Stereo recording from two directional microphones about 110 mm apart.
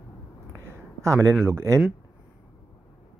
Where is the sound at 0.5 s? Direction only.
25° right (ahead or behind).